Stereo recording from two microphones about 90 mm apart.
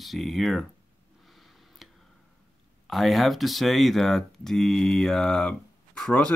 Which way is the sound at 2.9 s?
Centre (ahead or behind).